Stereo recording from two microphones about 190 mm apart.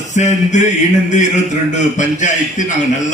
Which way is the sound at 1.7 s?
40° left (ahead or behind).